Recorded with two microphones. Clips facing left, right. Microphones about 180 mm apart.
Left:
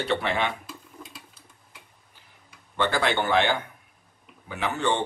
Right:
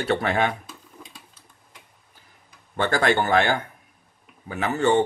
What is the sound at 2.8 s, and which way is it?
Speech, 45° right (ahead or behind).